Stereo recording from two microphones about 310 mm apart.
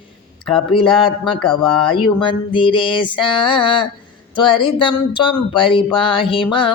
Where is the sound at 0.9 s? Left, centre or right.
Centre.